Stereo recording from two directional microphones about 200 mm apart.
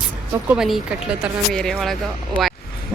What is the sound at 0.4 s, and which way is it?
Speech, 5° right (ahead or behind).